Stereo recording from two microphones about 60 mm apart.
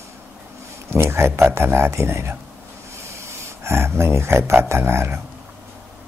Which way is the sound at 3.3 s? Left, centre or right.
Right.